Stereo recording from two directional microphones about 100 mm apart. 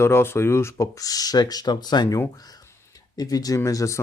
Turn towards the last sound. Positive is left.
turn(degrees=35)  # may be behind; listen again after turning